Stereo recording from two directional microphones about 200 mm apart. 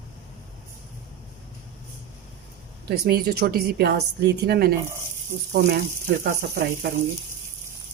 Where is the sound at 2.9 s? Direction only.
50° right (ahead or behind).